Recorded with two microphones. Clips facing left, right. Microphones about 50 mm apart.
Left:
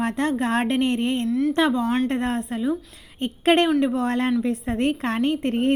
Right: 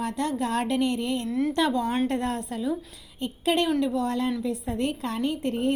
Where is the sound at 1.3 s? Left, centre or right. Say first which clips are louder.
Left 3 dB; centre.